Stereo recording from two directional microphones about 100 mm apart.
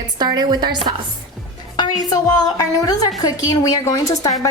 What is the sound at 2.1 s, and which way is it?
A woman's voice, 40° left (ahead or behind).